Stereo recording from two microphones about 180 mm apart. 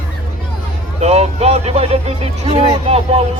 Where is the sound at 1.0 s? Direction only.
35° right (ahead or behind).